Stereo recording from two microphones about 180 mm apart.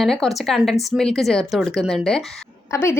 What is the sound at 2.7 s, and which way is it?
Speech, 15° left (ahead or behind).